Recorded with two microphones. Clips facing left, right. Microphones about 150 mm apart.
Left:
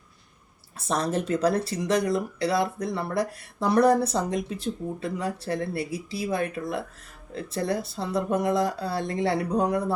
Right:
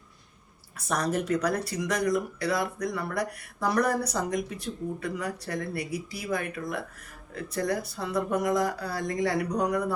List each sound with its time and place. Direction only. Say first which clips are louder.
0.8 s speech: left 2 dB; 25° left (ahead or behind)